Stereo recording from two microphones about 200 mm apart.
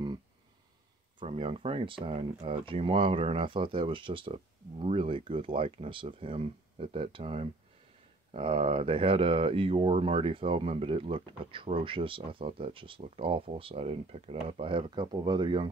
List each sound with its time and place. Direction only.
1.2 s speech: 30° right (ahead or behind)